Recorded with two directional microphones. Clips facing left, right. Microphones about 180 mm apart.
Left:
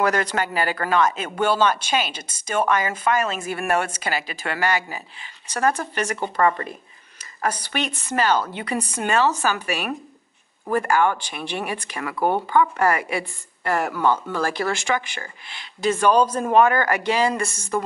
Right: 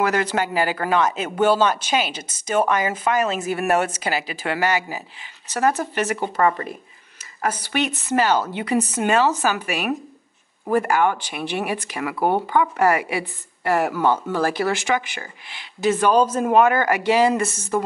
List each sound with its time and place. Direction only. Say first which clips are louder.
0.1 s speech: right 2 dB; 10° right (ahead or behind)